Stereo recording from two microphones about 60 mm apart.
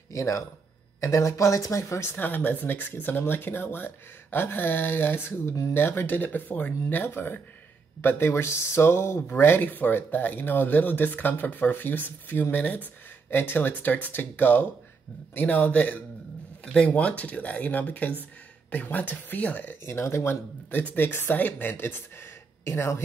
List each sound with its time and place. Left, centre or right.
0.1 s speech: left
2.0 s speech: left
20.7 s speech: left